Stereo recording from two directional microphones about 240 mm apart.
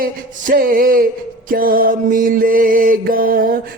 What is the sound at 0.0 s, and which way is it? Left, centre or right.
Mantra, right.